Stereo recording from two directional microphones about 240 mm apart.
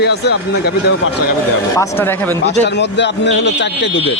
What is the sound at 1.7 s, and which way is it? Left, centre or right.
Speech, centre.